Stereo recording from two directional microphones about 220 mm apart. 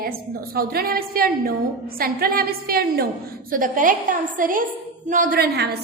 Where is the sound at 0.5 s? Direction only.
45° right (ahead or behind).